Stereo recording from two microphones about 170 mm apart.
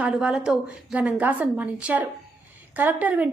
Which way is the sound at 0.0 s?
5° right (ahead or behind).